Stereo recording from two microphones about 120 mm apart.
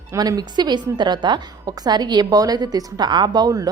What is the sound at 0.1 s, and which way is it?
A woman's voice, 30° right (ahead or behind).